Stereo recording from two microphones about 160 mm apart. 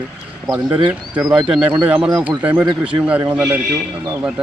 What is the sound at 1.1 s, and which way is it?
Speech, 5° right (ahead or behind).